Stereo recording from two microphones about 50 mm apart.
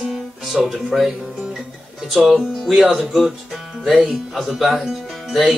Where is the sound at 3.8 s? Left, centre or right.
Centre.